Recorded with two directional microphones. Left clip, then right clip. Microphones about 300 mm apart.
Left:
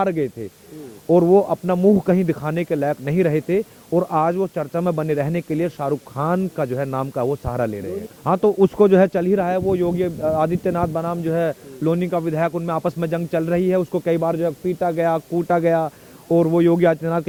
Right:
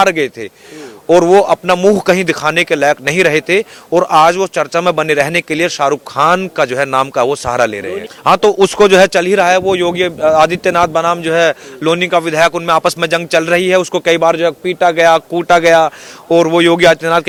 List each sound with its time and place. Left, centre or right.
0.0 s speech: centre
1.3 s a man's voice: right
2.0 s speech: centre